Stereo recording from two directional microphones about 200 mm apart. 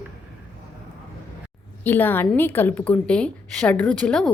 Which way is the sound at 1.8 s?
10° left (ahead or behind).